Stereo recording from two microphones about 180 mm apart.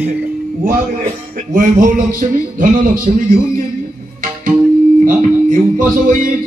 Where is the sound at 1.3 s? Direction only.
50° right (ahead or behind).